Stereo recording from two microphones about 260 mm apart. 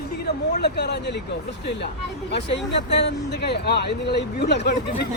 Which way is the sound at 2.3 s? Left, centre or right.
Left.